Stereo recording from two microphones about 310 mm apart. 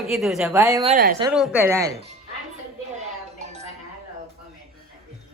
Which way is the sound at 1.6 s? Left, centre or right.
Centre.